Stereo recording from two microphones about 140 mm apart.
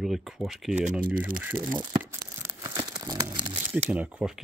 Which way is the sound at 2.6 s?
30° right (ahead or behind).